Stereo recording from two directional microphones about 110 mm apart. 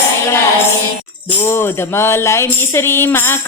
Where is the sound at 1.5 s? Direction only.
20° left (ahead or behind).